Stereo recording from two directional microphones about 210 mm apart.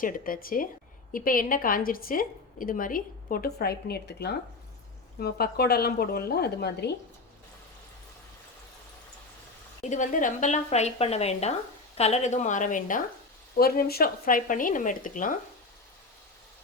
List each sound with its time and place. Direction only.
0.0 s a woman's voice: 40° left (ahead or behind)
9.8 s a woman's voice: 35° left (ahead or behind)